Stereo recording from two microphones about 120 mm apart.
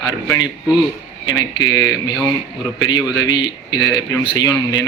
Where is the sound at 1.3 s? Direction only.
35° left (ahead or behind).